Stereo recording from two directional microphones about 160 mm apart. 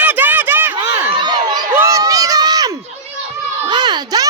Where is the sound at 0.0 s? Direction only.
10° right (ahead or behind).